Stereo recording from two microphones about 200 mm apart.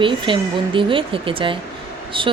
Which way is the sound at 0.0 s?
25° right (ahead or behind).